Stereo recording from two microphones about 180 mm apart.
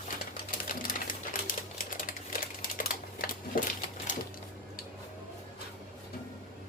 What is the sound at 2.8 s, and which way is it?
Typewriter, 55° left (ahead or behind).